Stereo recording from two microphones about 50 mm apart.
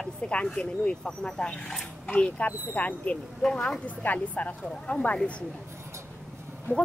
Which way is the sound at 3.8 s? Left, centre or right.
Left.